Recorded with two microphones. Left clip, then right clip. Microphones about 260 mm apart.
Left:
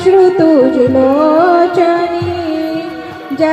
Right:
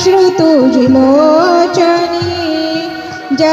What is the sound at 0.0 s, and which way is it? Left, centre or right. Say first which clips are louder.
Music: even; right.